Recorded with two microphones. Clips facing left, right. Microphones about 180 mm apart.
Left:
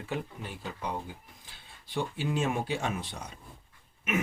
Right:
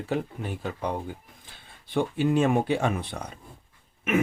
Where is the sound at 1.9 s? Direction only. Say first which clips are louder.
Right 8 dB; 55° right (ahead or behind).